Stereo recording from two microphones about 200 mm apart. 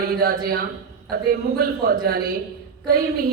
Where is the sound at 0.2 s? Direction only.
50° right (ahead or behind).